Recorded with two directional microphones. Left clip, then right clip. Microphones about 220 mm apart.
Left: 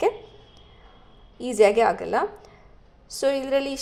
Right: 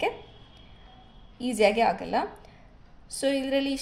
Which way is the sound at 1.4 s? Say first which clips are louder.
Left 5 dB; 25° left (ahead or behind).